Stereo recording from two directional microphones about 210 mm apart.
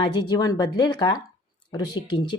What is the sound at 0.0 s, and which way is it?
A woman's voice, 20° left (ahead or behind).